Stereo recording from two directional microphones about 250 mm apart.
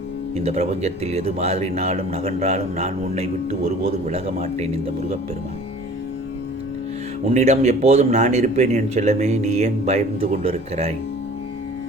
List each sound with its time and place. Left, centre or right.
0.3 s speech: right
7.3 s speech: right